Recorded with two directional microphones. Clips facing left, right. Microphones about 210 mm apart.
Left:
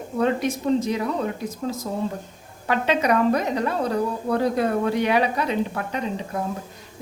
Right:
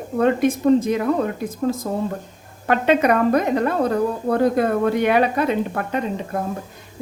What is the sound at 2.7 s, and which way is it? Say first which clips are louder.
A woman's voice: right 4 dB; 55° right (ahead or behind).